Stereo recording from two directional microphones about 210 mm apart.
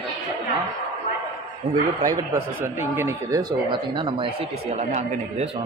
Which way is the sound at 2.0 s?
15° right (ahead or behind).